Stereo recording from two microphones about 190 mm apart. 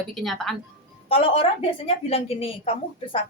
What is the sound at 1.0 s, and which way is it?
A woman's voice, 30° left (ahead or behind).